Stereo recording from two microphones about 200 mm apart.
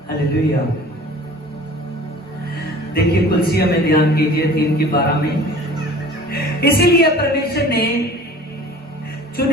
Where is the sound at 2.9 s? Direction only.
50° left (ahead or behind).